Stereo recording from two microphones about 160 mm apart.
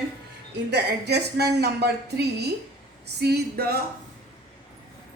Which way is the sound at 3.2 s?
90° right.